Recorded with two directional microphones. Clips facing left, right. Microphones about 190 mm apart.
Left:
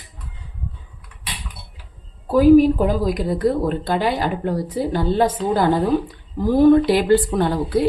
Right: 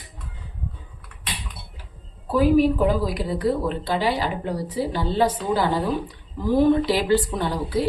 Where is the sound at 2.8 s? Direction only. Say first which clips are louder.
Left 2 dB; 45° left (ahead or behind).